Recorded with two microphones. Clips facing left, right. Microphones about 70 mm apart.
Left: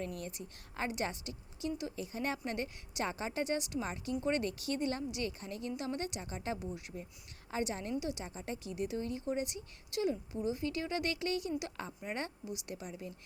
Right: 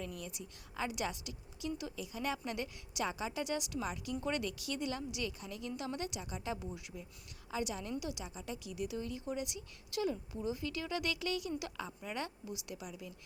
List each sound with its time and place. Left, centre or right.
0.0 s a woman's voice: left